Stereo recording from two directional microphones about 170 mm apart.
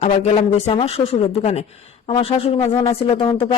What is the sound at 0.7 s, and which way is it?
Speech, 35° left (ahead or behind).